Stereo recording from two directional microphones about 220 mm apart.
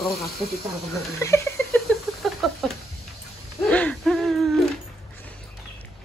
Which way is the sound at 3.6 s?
5° left (ahead or behind).